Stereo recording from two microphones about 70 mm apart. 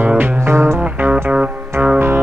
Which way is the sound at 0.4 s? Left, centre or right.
Right.